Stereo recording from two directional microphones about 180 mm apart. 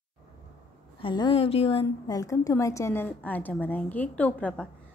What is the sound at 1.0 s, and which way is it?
Speech, 25° left (ahead or behind).